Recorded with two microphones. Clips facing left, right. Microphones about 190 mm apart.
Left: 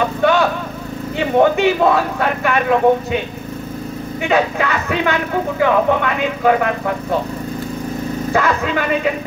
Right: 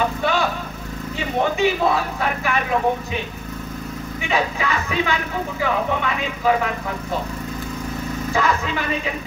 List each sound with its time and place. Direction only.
0.2 s vehicle: 60° left (ahead or behind)
1.1 s speech: 60° left (ahead or behind)
4.3 s speech: 60° left (ahead or behind)
8.3 s speech: 60° left (ahead or behind)